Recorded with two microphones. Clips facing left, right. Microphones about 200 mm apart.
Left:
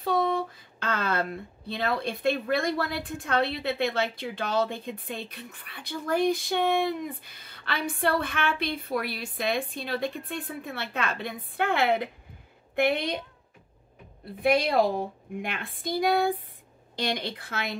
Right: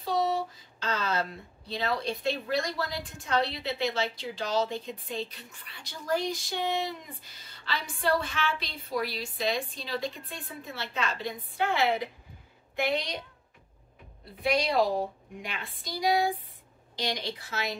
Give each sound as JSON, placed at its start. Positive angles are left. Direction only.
{"t": 0.0, "sound": "speech", "side_deg": 55}
{"t": 14.4, "sound": "a woman's voice", "side_deg": 55}